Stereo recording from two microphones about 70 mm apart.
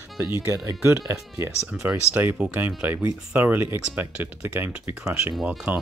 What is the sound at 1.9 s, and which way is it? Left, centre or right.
Speech, right.